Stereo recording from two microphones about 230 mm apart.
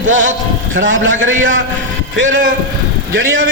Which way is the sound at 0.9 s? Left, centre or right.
Right.